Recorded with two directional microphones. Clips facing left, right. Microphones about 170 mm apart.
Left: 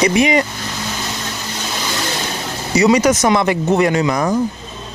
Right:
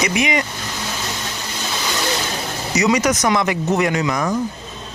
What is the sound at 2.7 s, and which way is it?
Speech, 30° left (ahead or behind).